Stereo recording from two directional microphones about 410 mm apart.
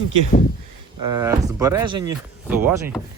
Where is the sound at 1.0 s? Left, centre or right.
Centre.